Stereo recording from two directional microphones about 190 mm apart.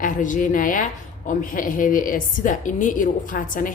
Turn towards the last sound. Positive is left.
turn(degrees=45)  # may be behind; listen again after turning